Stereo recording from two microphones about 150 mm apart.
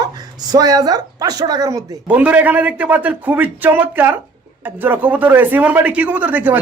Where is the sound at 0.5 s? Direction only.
25° right (ahead or behind).